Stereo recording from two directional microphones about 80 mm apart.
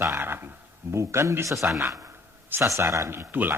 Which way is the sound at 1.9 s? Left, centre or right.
Right.